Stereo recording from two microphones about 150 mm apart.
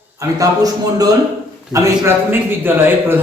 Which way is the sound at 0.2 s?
25° right (ahead or behind).